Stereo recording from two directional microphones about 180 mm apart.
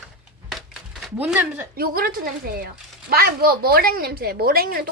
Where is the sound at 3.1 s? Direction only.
55° right (ahead or behind).